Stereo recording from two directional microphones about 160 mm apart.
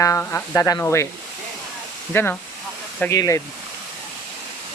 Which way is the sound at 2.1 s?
10° left (ahead or behind).